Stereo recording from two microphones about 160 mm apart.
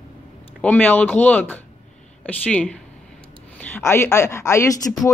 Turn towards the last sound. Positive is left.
turn(degrees=20)  # may be behind; listen again after turning